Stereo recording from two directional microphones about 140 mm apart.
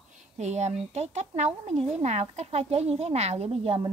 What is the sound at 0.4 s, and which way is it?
A woman's voice, 55° right (ahead or behind).